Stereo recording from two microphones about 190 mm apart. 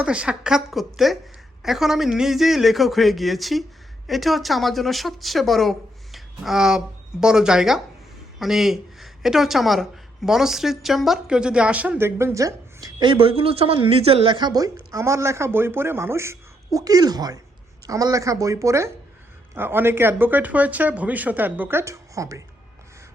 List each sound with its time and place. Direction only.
0.0 s a man's voice: 5° right (ahead or behind)